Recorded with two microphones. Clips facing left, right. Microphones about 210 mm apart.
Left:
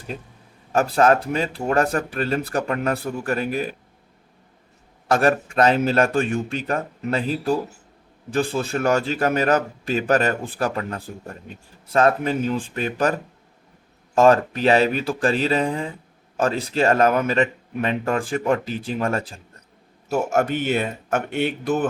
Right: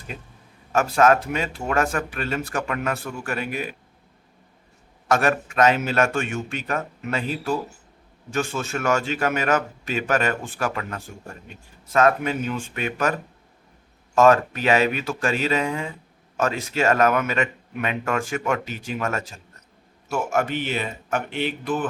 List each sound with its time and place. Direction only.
0.7 s a man's voice: 35° left (ahead or behind)
5.0 s a man's voice: 35° left (ahead or behind)
14.2 s a man's voice: 30° left (ahead or behind)